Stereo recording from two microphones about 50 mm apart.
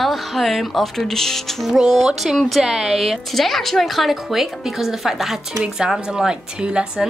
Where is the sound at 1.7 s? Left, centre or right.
Centre.